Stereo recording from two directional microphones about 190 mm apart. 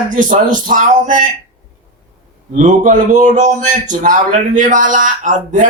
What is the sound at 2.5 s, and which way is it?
A man's voice, 40° right (ahead or behind).